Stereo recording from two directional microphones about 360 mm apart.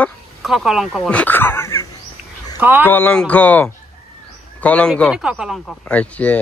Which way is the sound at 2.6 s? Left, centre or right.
Centre.